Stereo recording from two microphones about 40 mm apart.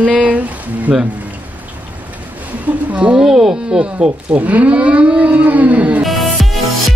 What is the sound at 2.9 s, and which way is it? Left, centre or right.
Speech, right.